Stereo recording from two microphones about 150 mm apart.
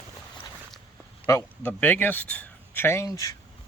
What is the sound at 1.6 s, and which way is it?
Speech, 10° left (ahead or behind).